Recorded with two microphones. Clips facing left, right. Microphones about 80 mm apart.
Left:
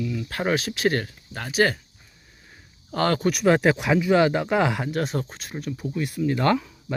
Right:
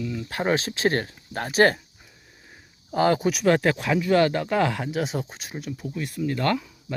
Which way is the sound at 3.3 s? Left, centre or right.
Centre.